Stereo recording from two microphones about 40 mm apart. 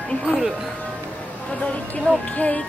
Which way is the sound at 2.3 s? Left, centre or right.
Left.